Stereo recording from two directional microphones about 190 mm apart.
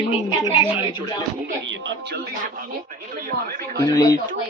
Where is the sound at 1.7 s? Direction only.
75° right (ahead or behind).